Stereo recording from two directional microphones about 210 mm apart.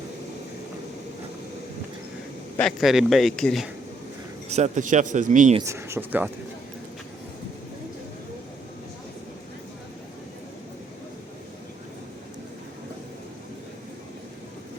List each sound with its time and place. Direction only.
2.6 s speech: centre (ahead or behind)
4.4 s speech: 30° right (ahead or behind)
5.5 s speech: 15° right (ahead or behind)